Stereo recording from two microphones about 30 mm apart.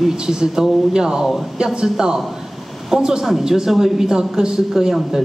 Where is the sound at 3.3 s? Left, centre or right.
Centre.